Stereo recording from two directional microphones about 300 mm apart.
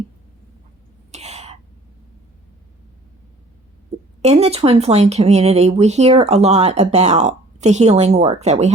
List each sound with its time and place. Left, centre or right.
1.1 s throat clearing: right
4.2 s speech: right